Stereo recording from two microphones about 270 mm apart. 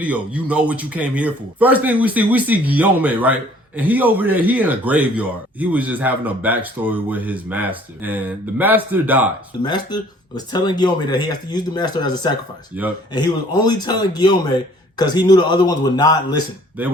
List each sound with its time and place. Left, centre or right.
0.0 s a man's voice: centre
9.6 s speech: centre
12.7 s speech: centre
13.1 s speech: centre